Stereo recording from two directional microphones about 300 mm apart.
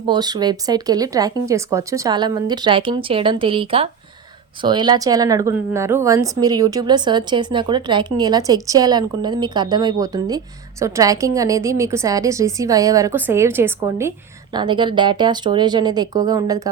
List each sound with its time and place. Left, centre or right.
0.0 s speech: centre